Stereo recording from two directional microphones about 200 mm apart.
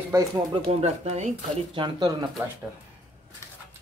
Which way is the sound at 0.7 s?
35° right (ahead or behind).